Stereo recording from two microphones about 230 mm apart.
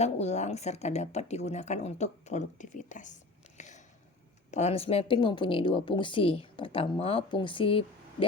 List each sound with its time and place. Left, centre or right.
0.0 s a woman's voice: left
3.6 s a sound: left
4.5 s a woman's voice: left